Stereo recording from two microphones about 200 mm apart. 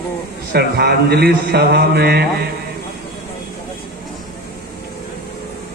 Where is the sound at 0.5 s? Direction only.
55° right (ahead or behind).